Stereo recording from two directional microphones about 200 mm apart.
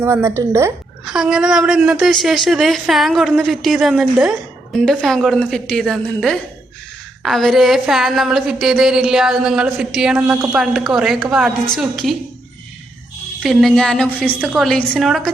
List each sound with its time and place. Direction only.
0.0 s speech: 10° right (ahead or behind)
1.0 s a woman's voice: centre (ahead or behind)
13.4 s a woman's voice: centre (ahead or behind)